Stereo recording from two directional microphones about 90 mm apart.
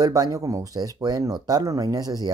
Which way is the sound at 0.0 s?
40° right (ahead or behind).